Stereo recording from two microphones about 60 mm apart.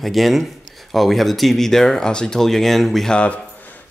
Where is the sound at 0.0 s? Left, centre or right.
Centre.